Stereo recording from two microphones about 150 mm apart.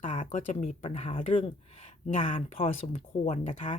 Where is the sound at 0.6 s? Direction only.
40° left (ahead or behind).